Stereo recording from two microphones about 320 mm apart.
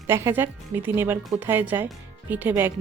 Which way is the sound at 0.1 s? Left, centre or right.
Centre.